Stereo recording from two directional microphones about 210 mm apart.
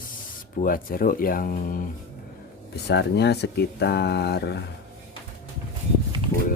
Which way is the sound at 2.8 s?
50° left (ahead or behind).